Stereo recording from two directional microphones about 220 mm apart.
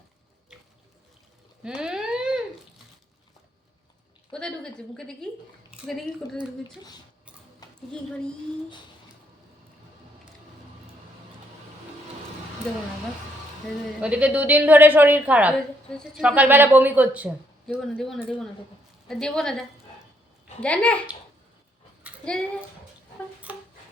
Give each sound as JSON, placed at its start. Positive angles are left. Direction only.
{"t": 1.6, "sound": "a sound", "side_deg": -5}
{"t": 4.3, "sound": "a woman's voice", "side_deg": 5}
{"t": 7.6, "sound": "a sound", "side_deg": 15}
{"t": 14.0, "sound": "a woman's voice", "side_deg": -5}
{"t": 22.2, "sound": "speech", "side_deg": 5}
{"t": 23.5, "sound": "music", "side_deg": -5}